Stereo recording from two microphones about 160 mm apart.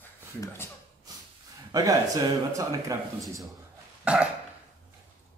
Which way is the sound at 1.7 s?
25° right (ahead or behind).